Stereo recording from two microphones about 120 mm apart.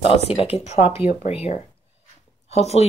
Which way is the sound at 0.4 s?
60° left (ahead or behind).